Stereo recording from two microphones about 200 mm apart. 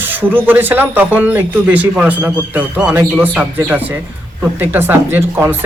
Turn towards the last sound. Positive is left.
turn(degrees=-10)  # may be behind; listen again after turning